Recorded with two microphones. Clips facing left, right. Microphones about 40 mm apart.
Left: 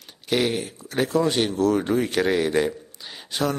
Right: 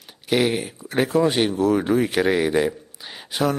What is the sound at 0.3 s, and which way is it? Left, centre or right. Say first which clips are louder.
Speech: right 2 dB; centre.